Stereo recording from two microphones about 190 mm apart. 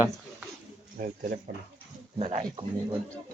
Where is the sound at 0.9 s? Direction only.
55° right (ahead or behind).